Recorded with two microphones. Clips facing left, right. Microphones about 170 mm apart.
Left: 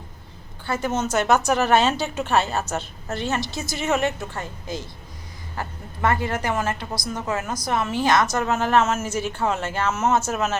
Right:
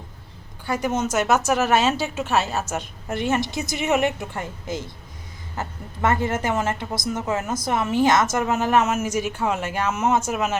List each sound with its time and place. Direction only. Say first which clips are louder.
0.6 s a woman's voice: right 1 dB; 10° right (ahead or behind)